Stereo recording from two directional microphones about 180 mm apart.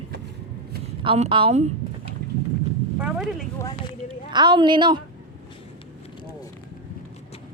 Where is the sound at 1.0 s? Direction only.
30° right (ahead or behind).